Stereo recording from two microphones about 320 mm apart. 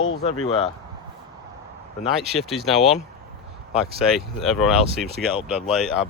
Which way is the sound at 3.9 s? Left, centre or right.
Centre.